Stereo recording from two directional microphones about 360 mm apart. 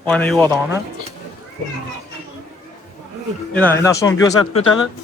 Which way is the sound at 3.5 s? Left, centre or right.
Centre.